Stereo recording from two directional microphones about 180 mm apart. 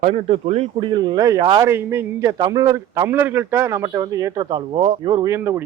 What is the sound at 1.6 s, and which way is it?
A man's voice, 15° right (ahead or behind).